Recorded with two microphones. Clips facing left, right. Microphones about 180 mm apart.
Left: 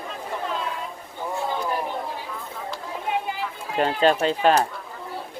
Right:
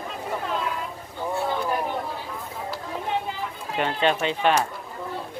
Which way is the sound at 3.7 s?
40° left (ahead or behind).